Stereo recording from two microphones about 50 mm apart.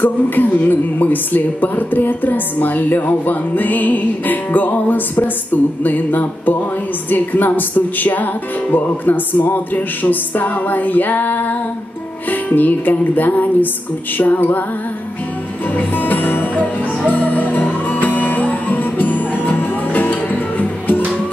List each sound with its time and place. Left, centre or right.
0.0 s a woman's voice: left
15.9 s music: left